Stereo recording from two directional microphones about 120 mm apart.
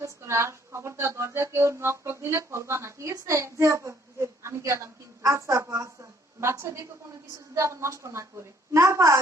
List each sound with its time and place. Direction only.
0.0 s a woman's voice: 25° right (ahead or behind)